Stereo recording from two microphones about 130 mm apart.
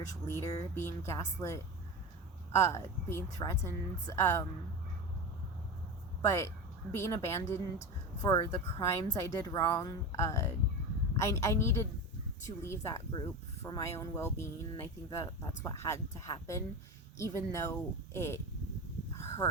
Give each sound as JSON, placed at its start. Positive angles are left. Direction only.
{"t": 0.4, "sound": "a woman's voice", "side_deg": 30}
{"t": 6.2, "sound": "a woman's voice", "side_deg": 20}
{"t": 19.1, "sound": "a sound", "side_deg": 20}